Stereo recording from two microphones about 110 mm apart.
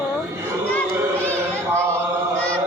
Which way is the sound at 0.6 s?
15° left (ahead or behind).